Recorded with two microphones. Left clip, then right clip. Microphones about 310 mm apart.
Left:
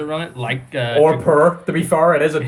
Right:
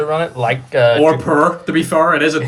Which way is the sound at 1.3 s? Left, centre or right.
Centre.